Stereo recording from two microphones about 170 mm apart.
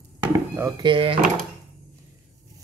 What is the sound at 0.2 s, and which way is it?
Speech, 20° right (ahead or behind).